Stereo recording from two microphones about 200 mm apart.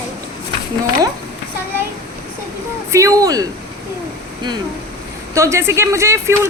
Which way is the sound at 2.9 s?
15° right (ahead or behind).